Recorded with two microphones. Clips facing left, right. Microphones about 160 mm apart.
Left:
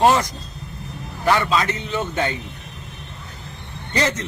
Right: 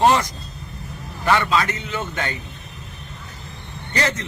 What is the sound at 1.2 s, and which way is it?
Speech, 10° left (ahead or behind).